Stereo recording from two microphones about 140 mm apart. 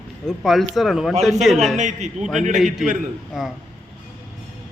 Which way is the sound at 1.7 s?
60° right (ahead or behind).